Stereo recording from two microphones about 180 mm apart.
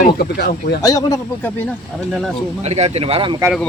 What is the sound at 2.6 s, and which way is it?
Speech, 35° right (ahead or behind).